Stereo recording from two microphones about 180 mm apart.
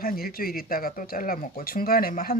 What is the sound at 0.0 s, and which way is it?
Speech, 55° left (ahead or behind).